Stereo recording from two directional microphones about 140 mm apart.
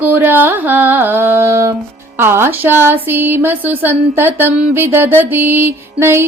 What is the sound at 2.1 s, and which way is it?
Speech, 15° right (ahead or behind).